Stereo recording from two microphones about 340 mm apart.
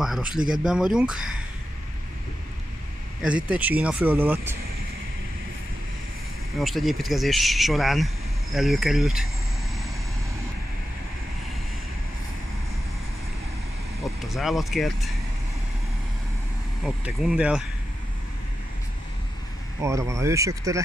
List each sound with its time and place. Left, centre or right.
0.0 s speech: centre
3.2 s speech: centre
6.6 s speech: centre
14.0 s speech: centre
16.8 s speech: centre
19.8 s speech: centre